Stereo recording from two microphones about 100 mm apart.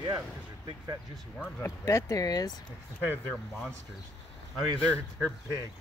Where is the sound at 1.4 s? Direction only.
25° left (ahead or behind).